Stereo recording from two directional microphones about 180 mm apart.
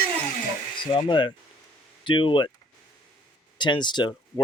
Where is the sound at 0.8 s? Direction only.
25° left (ahead or behind).